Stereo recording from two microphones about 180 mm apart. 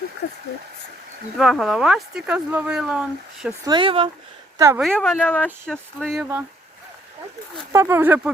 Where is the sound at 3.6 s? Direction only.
25° right (ahead or behind).